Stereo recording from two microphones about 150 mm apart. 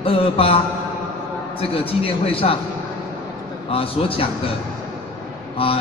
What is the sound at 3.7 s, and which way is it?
Speech, 40° left (ahead or behind).